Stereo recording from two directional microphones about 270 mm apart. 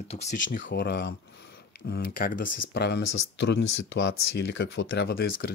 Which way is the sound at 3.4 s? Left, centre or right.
Left.